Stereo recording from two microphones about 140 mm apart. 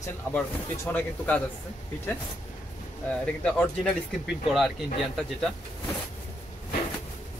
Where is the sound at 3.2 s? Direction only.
10° left (ahead or behind).